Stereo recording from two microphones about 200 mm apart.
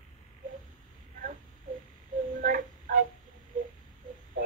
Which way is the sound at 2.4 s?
40° right (ahead or behind).